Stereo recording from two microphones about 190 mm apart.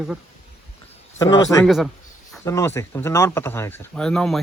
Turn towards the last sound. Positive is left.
turn(degrees=5)  # may be behind; listen again after turning